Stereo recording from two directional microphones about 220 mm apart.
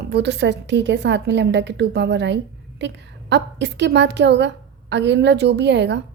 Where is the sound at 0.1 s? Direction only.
50° right (ahead or behind).